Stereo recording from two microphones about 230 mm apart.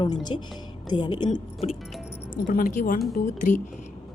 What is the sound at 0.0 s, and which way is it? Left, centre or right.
Speech, centre.